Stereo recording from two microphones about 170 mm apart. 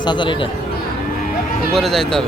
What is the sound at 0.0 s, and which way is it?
Speech, 25° left (ahead or behind).